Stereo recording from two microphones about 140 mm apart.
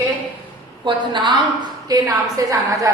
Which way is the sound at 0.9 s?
35° right (ahead or behind).